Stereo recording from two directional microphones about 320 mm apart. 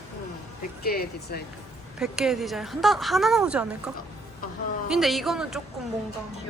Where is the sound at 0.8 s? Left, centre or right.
Left.